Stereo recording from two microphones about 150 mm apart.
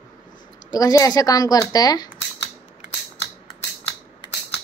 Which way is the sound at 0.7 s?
25° left (ahead or behind).